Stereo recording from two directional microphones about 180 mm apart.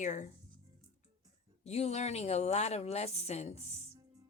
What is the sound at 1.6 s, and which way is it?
Speech, 35° left (ahead or behind).